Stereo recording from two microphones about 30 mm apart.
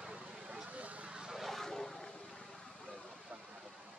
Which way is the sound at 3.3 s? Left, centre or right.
Right.